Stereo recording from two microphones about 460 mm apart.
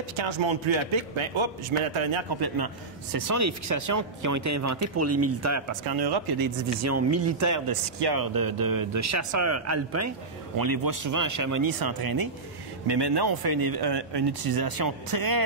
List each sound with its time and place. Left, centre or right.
0.2 s a man's voice: right
2.4 s a man's voice: right
5.9 s a man's voice: right
6.8 s a man's voice: right
10.6 s a man's voice: right
12.8 s a man's voice: right